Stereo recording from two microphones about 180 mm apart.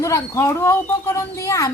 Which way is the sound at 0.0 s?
15° left (ahead or behind).